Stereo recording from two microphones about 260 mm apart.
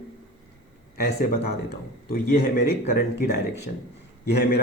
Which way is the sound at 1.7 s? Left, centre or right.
Left.